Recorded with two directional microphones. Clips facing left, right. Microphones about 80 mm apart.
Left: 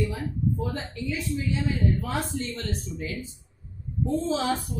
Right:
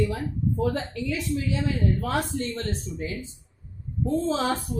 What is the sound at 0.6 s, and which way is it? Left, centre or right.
Speech, right.